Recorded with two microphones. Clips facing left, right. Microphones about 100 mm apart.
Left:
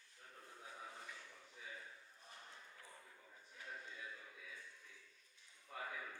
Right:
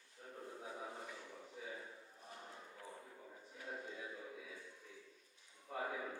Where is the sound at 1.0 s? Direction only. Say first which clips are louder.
Right 5 dB; 30° right (ahead or behind).